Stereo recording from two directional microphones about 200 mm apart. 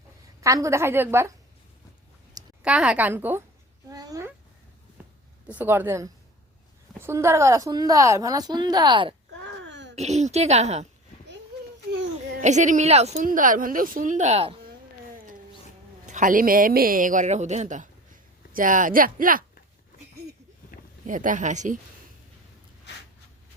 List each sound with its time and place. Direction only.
0.4 s a woman's voice: 15° right (ahead or behind)
2.6 s a woman's voice: 5° right (ahead or behind)
3.8 s a sound: 20° right (ahead or behind)
5.5 s a woman's voice: 10° right (ahead or behind)
9.6 s a sound: 60° right (ahead or behind)
9.9 s a woman's voice: 35° right (ahead or behind)
12.4 s a woman's voice: 35° right (ahead or behind)
16.0 s speech: 40° right (ahead or behind)
21.1 s a woman's voice: 40° right (ahead or behind)